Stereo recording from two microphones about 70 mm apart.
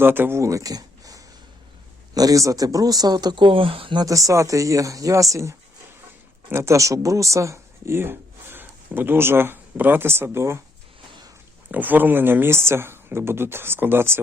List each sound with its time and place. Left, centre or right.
0.0 s speech: right
0.3 s speech: right
4.1 s speech: right
11.7 s speech: right